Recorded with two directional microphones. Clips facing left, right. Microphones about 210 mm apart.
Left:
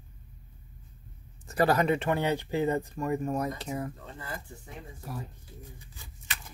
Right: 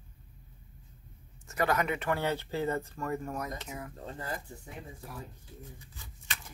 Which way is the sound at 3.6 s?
35° left (ahead or behind).